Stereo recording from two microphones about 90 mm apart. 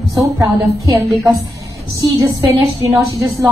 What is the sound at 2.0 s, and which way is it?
Speech, 45° right (ahead or behind).